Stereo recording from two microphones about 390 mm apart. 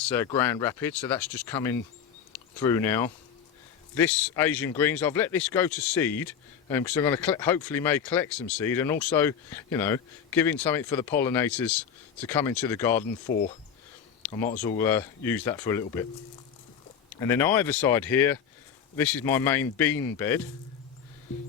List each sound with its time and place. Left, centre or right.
0.0 s speech: centre
13.3 s speech: left
14.2 s a sound: centre
14.6 s speech: centre
17.2 s speech: centre